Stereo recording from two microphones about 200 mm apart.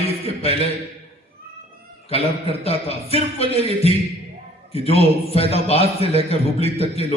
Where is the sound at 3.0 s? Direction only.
30° left (ahead or behind).